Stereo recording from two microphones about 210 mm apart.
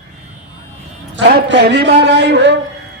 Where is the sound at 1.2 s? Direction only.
55° right (ahead or behind).